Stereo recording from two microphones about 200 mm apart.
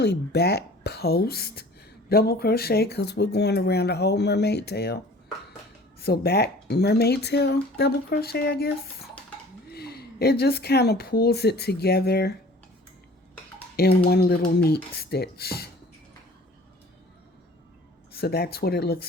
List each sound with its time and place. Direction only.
0.0 s speech: 55° left (ahead or behind)
13.7 s speech: 50° left (ahead or behind)
18.1 s speech: 50° left (ahead or behind)